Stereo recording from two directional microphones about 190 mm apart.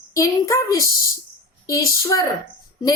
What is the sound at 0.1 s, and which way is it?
A woman's voice, 15° left (ahead or behind).